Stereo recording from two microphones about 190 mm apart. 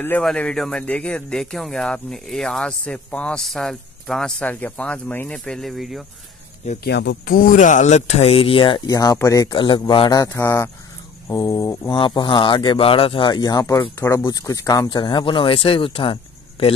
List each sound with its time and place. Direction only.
0.0 s speech: 5° left (ahead or behind)
6.8 s speech: 65° left (ahead or behind); by 16.7 s 30° left (ahead or behind)